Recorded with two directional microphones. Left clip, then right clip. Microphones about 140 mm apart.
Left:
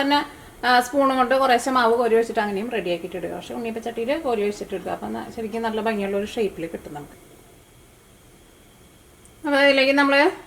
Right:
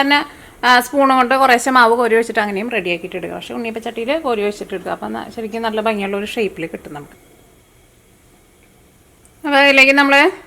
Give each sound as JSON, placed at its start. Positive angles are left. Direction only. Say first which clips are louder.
{"t": 0.0, "sound": "a woman's voice", "louder": "right 6 dB", "side_deg": -30}
{"t": 9.4, "sound": "a woman's voice", "louder": "right 7 dB", "side_deg": -25}